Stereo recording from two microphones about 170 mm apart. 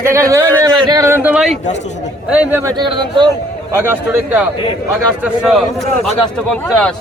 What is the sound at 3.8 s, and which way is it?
Speech, 10° right (ahead or behind).